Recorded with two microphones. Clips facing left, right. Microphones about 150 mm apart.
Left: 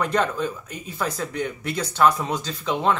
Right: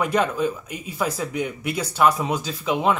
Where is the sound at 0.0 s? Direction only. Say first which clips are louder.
Right 2 dB; 10° right (ahead or behind).